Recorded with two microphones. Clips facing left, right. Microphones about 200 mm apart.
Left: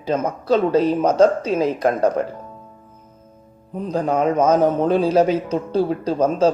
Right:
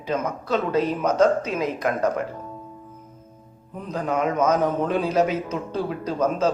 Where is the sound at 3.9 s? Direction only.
30° left (ahead or behind).